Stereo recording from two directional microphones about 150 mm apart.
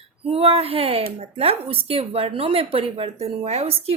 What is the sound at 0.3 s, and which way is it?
A woman's voice, 40° right (ahead or behind).